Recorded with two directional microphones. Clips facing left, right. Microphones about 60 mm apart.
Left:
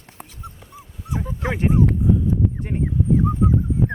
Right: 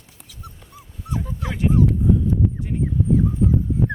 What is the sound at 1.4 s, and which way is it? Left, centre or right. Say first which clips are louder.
Dog: left 2 dB; left.